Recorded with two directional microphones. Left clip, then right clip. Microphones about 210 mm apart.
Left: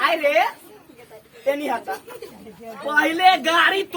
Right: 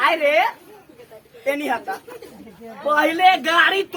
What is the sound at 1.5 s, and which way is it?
A man's voice, 15° right (ahead or behind).